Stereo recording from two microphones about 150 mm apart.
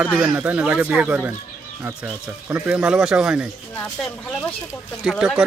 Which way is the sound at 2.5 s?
10° right (ahead or behind).